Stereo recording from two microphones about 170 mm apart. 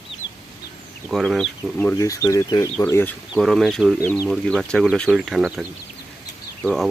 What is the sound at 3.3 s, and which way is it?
Speech, centre (ahead or behind).